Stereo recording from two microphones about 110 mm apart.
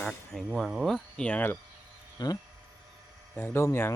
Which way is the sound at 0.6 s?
Centre (ahead or behind).